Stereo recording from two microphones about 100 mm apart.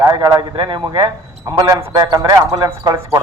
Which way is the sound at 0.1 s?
45° right (ahead or behind).